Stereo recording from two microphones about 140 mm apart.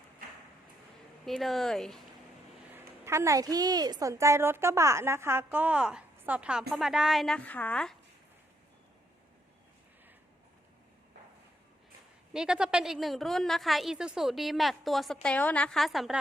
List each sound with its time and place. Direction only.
1.2 s a woman's voice: centre (ahead or behind)
2.7 s a woman's voice: 20° right (ahead or behind); by 7.9 s 10° left (ahead or behind)
12.3 s a woman's voice: 5° right (ahead or behind)